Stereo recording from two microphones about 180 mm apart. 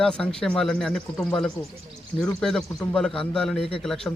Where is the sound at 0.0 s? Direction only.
5° left (ahead or behind).